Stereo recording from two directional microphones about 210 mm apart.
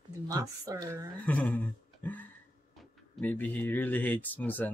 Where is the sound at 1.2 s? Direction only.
5° left (ahead or behind).